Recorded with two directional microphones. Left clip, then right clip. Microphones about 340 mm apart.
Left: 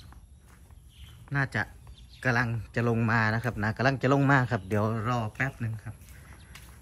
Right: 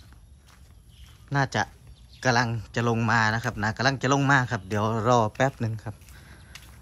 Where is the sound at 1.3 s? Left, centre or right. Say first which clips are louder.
Right 4 dB; centre.